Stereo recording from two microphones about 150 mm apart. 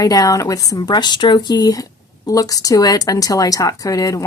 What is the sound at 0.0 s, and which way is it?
Speech, 25° left (ahead or behind).